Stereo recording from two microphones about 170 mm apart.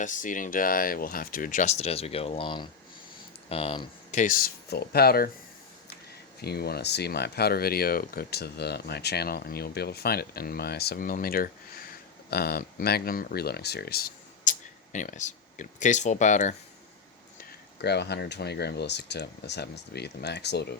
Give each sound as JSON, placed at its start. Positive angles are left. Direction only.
{"t": 0.0, "sound": "speech", "side_deg": 50}
{"t": 4.2, "sound": "speech", "side_deg": 55}
{"t": 6.4, "sound": "speech", "side_deg": 65}
{"t": 14.9, "sound": "speech", "side_deg": 45}
{"t": 17.7, "sound": "speech", "side_deg": 75}